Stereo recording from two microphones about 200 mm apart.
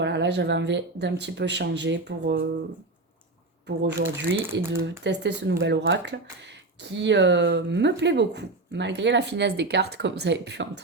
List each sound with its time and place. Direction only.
0.0 s speech: 60° right (ahead or behind)
3.8 s speech: 60° right (ahead or behind)
4.4 s speech: 10° right (ahead or behind)
4.8 s speech: 60° right (ahead or behind)